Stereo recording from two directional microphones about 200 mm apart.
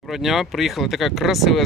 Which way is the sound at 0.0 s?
Centre (ahead or behind).